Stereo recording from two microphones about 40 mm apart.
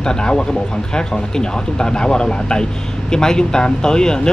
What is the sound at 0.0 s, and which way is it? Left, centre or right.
Speech, left.